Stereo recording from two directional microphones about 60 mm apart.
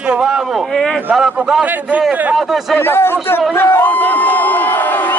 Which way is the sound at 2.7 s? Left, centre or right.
Left.